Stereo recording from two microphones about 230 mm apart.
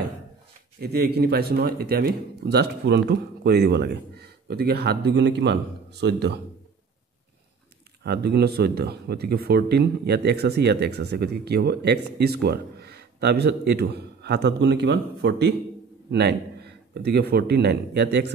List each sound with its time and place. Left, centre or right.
0.7 s speech: right
8.0 s speech: right